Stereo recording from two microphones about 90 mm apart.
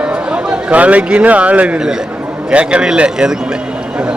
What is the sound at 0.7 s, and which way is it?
A man's voice, 15° right (ahead or behind).